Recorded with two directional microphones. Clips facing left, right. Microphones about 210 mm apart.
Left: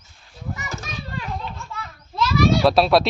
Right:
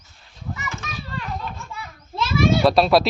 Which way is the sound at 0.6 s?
40° left (ahead or behind).